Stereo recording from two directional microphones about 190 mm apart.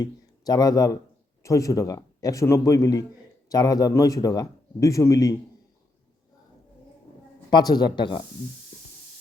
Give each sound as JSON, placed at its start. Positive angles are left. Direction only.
{"t": 0.0, "sound": "a man's voice", "side_deg": 20}
{"t": 7.5, "sound": "speech", "side_deg": 20}